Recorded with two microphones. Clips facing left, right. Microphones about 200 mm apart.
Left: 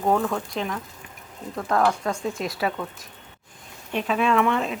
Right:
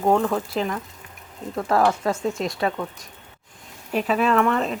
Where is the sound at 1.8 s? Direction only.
5° right (ahead or behind).